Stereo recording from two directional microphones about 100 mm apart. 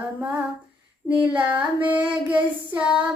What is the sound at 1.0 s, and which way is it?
Child singing, 15° right (ahead or behind).